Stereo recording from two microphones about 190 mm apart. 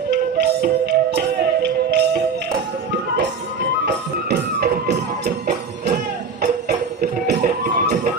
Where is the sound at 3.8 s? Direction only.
60° right (ahead or behind).